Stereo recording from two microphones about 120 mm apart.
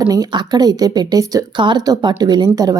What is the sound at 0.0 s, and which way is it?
Speech, 30° right (ahead or behind).